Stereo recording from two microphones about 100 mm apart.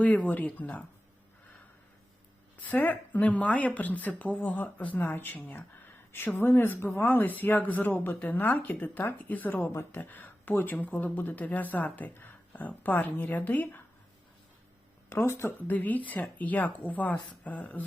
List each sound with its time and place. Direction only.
0.0 s speech: 15° left (ahead or behind)
2.6 s speech: 20° left (ahead or behind)
15.1 s speech: 25° left (ahead or behind)